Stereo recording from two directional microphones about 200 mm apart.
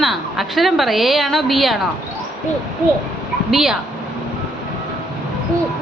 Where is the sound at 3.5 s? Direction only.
Centre (ahead or behind).